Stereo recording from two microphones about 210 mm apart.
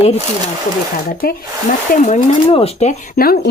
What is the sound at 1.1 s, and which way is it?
A woman's voice, 45° left (ahead or behind).